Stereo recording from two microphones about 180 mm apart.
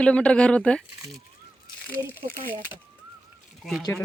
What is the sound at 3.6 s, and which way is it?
Speech, centre (ahead or behind).